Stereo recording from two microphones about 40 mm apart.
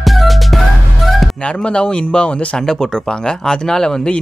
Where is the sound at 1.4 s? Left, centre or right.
Left.